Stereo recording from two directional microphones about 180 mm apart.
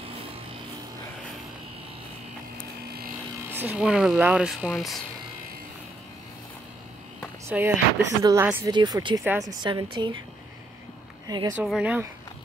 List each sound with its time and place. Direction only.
3.4 s speech: 10° right (ahead or behind)
7.4 s speech: 10° right (ahead or behind)
8.7 s a woman's voice: 25° right (ahead or behind)
11.2 s speech: 25° right (ahead or behind)
11.5 s speech: 5° right (ahead or behind)